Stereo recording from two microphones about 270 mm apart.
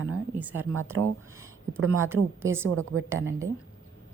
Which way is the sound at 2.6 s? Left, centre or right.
Right.